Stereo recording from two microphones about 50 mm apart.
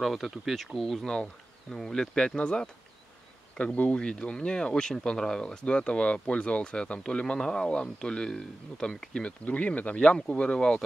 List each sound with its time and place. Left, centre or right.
0.0 s speech: centre
3.5 s speech: left